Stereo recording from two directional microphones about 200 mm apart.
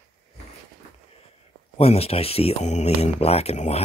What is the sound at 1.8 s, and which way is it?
Speech, 30° left (ahead or behind).